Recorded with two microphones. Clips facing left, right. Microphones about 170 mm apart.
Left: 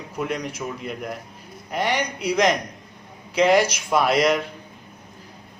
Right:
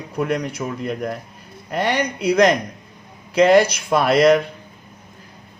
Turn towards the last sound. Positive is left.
turn(degrees=-60)  # may be behind; listen again after turning